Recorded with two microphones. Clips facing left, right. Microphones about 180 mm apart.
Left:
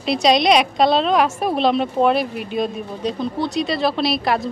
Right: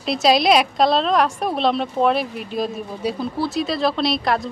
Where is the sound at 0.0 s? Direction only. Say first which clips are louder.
Left 1 dB; centre (ahead or behind).